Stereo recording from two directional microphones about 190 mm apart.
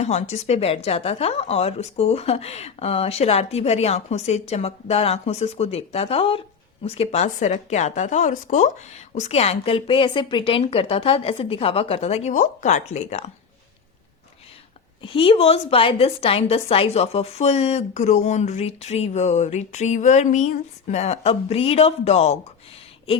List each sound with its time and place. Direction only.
0.0 s a woman's voice: 35° left (ahead or behind)
15.0 s a woman's voice: 30° left (ahead or behind)